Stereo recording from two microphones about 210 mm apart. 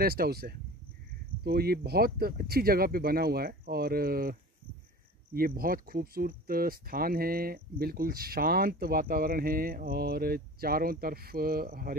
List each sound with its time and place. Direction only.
0.0 s speech: 45° right (ahead or behind)